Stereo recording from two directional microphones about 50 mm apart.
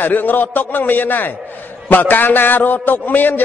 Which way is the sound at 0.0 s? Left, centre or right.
Left.